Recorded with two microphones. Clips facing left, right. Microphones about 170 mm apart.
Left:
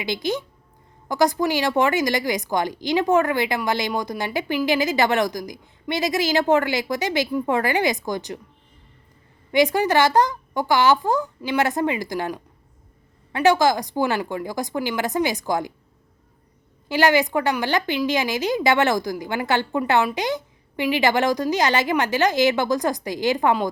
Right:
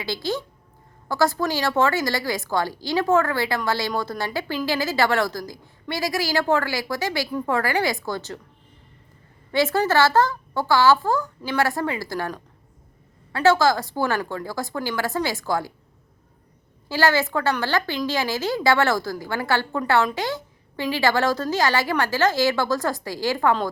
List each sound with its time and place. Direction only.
0.0 s a woman's voice: 20° left (ahead or behind)
9.5 s a woman's voice: 15° left (ahead or behind)
16.9 s a woman's voice: 20° left (ahead or behind)